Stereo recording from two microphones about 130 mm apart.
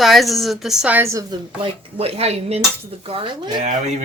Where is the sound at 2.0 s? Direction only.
50° right (ahead or behind).